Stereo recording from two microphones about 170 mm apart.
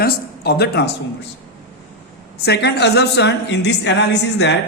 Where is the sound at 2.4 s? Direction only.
75° left (ahead or behind).